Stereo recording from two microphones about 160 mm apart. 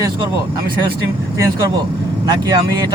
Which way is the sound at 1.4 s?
25° right (ahead or behind).